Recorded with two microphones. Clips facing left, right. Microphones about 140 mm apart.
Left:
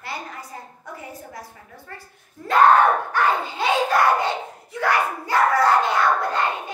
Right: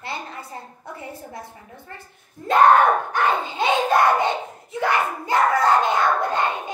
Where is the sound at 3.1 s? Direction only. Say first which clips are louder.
Even; 20° right (ahead or behind).